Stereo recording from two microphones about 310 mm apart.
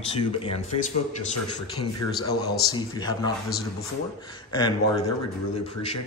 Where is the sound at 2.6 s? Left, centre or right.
Centre.